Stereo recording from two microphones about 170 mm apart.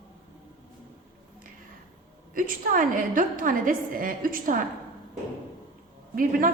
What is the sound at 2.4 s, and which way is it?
A woman's voice, 55° right (ahead or behind).